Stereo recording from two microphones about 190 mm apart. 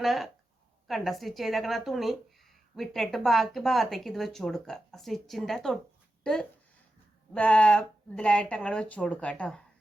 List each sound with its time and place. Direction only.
0.0 s speech: centre (ahead or behind)
7.3 s speech: 5° left (ahead or behind)